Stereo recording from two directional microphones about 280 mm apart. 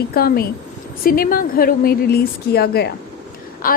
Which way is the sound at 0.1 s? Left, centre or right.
Left.